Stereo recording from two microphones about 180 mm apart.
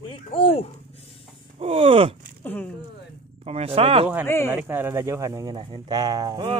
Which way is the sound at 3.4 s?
35° right (ahead or behind).